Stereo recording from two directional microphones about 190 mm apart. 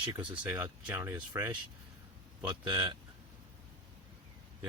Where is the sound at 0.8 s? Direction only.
15° right (ahead or behind).